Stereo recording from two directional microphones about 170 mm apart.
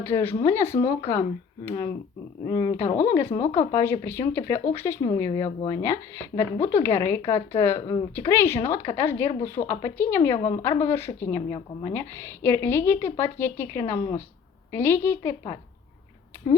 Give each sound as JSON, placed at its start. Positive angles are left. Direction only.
{"t": 0.0, "sound": "a woman's voice", "side_deg": 15}
{"t": 2.5, "sound": "a woman's voice", "side_deg": 25}
{"t": 2.7, "sound": "a woman's voice", "side_deg": 15}
{"t": 11.5, "sound": "a woman's voice", "side_deg": 30}
{"t": 11.9, "sound": "a woman's voice", "side_deg": 15}